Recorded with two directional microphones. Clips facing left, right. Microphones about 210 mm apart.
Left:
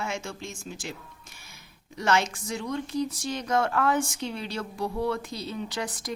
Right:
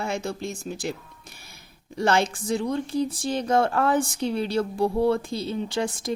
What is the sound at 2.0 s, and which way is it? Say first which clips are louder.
Speech: right 3 dB; 30° right (ahead or behind).